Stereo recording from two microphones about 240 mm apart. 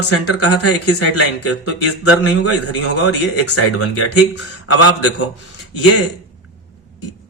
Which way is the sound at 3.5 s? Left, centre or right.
Left.